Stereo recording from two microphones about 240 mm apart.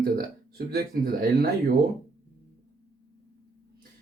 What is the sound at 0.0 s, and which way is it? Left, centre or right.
Speech, right.